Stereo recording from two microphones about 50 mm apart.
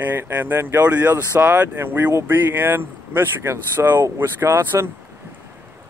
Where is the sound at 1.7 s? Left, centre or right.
Right.